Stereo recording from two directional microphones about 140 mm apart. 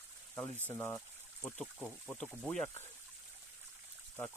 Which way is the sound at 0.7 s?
15° left (ahead or behind).